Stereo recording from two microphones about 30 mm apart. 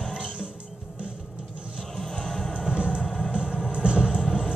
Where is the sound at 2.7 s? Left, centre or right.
Right.